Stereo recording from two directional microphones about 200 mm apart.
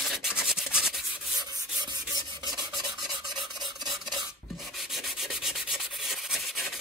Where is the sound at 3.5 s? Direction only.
20° right (ahead or behind).